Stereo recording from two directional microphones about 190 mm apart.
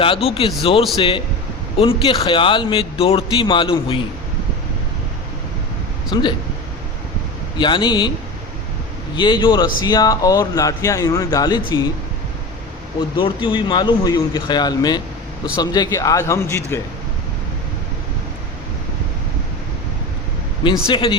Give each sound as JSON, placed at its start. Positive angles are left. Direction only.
{"t": 0.0, "sound": "a man's voice", "side_deg": 30}
{"t": 6.1, "sound": "a man's voice", "side_deg": 25}
{"t": 7.6, "sound": "a man's voice", "side_deg": 25}
{"t": 9.1, "sound": "a man's voice", "side_deg": 25}
{"t": 13.1, "sound": "a man's voice", "side_deg": 25}
{"t": 20.8, "sound": "a man's voice", "side_deg": 25}